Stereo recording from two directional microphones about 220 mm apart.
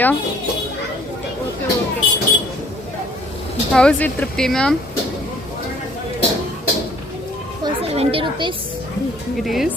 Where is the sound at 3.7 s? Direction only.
5° left (ahead or behind).